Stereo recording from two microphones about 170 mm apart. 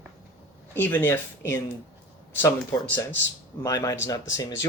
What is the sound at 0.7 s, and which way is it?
Speech, 10° left (ahead or behind).